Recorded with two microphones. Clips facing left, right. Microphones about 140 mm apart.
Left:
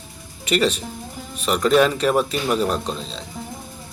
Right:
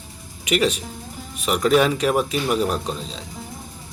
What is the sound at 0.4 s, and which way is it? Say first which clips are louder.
Speech: left 1 dB; 10° right (ahead or behind).